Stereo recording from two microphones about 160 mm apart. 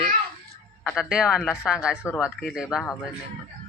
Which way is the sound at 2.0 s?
15° left (ahead or behind).